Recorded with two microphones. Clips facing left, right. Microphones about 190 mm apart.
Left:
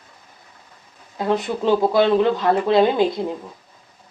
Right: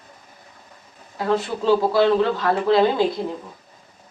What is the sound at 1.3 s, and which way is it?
Speech, 20° left (ahead or behind).